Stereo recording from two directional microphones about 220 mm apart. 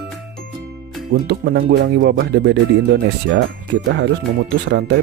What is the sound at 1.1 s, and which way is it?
Speech, 45° right (ahead or behind).